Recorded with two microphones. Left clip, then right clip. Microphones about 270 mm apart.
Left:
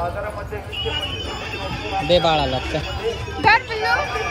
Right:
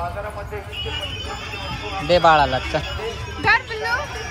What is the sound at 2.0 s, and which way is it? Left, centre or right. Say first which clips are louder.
Speech: right 3 dB; right.